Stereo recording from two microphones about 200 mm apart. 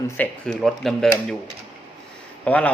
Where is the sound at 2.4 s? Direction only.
5° left (ahead or behind).